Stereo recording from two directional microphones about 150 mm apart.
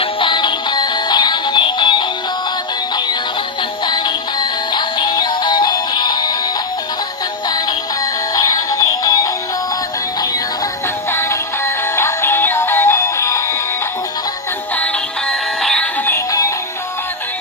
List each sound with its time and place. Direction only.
0.0 s music: 35° left (ahead or behind)
3.8 s music: 30° left (ahead or behind)
8.4 s music: 25° left (ahead or behind)
11.1 s music: 15° left (ahead or behind)
15.3 s music: 5° left (ahead or behind)
16.1 s music: 25° left (ahead or behind)